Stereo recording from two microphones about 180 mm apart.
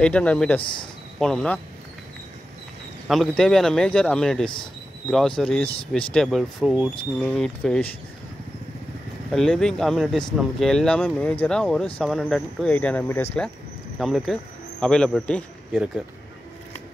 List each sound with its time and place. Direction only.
0.0 s speech: 5° left (ahead or behind)
0.6 s speech: 25° left (ahead or behind)
1.2 s speech: 5° left (ahead or behind)
3.1 s speech: centre (ahead or behind)
9.3 s speech: 5° left (ahead or behind)
13.9 s speech: centre (ahead or behind)